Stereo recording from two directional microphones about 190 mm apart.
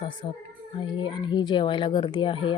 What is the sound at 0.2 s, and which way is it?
Speech, 25° left (ahead or behind).